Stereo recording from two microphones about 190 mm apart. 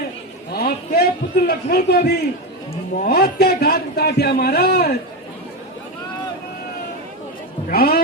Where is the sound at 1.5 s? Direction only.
55° left (ahead or behind).